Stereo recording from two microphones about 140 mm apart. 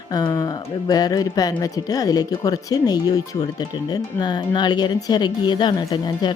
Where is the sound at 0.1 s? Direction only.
25° left (ahead or behind).